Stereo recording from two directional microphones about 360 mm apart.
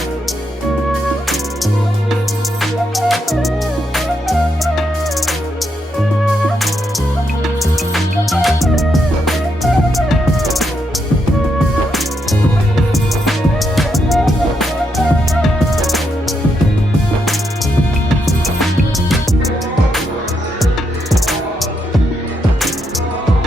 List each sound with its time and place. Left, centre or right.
2.6 s music: centre
7.4 s music: centre
11.9 s music: centre
18.3 s music: centre